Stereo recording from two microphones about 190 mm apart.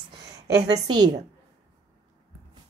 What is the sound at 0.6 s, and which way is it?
Speech, 20° right (ahead or behind).